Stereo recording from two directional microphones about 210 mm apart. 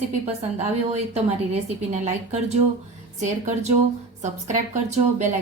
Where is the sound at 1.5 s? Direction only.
30° right (ahead or behind).